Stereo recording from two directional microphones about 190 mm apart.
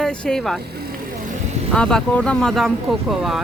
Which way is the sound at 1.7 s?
5° left (ahead or behind).